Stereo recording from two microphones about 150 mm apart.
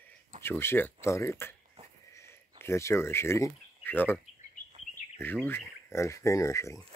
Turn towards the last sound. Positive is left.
turn(degrees=20)  # may be behind; listen again after turning